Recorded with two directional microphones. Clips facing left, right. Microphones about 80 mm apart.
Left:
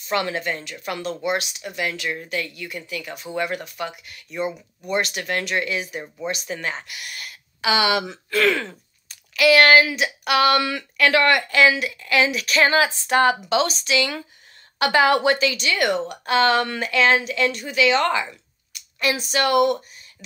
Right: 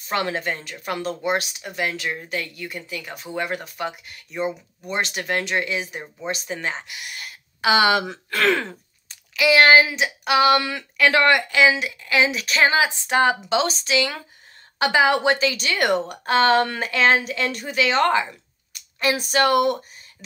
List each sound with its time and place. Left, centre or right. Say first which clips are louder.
0.1 s speech: even; right
7.6 s speech: right 2 dB; right
9.3 s speech: even; centre
17.5 s speech: left 3 dB; right
18.7 s a sound: right 1 dB; right
19.3 s speech: even; right